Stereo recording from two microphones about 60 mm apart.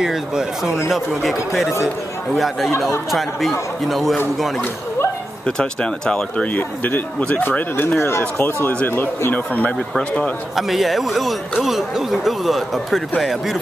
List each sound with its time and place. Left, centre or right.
0.0 s speech: centre
5.6 s speech: centre
6.4 s speech: left
10.5 s speech: centre